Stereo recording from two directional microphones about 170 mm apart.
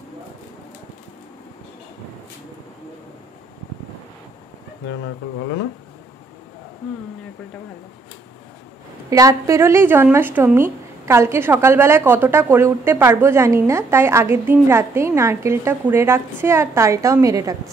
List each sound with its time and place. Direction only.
4.8 s speech: 90° left
9.1 s a woman's voice: 20° right (ahead or behind)